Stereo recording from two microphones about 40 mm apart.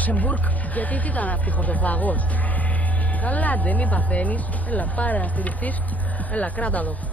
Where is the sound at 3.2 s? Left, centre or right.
Left.